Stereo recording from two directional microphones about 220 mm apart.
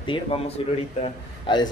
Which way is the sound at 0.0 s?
20° left (ahead or behind).